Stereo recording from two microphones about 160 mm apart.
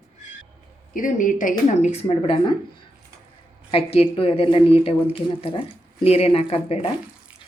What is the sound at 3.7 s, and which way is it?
A woman's voice, 40° left (ahead or behind).